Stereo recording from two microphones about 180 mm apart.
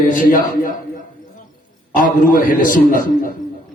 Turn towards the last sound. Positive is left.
turn(degrees=50)  # may be behind; listen again after turning